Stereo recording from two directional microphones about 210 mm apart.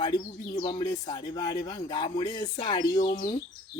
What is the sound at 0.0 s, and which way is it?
Speech, 20° left (ahead or behind).